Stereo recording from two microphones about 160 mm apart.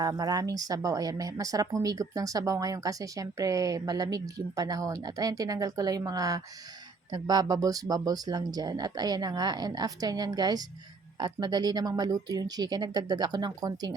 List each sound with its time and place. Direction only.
0.0 s speech: 25° right (ahead or behind)